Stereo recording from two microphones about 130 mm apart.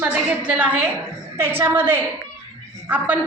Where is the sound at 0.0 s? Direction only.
10° right (ahead or behind).